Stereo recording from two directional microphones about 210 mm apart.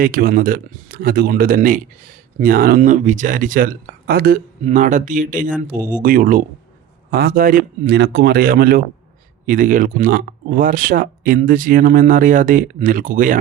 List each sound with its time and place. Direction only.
0.0 s speech: 45° right (ahead or behind)